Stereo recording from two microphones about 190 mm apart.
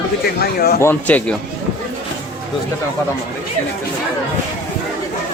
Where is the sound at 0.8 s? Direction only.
10° left (ahead or behind).